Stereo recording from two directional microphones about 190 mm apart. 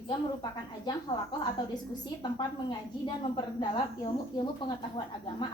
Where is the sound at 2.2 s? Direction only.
25° left (ahead or behind).